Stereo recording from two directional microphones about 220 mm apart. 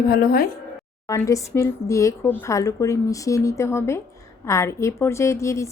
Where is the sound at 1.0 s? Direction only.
15° left (ahead or behind).